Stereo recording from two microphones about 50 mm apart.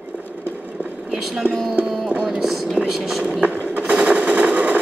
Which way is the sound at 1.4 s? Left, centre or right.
Right.